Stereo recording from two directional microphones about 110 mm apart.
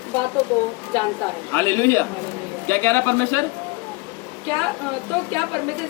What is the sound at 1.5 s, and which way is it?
A man's voice, 20° left (ahead or behind).